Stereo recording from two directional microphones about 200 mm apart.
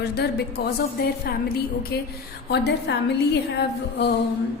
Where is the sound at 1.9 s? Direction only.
50° left (ahead or behind).